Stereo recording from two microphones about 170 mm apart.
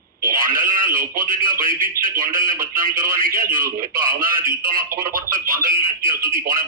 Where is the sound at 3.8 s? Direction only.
55° right (ahead or behind).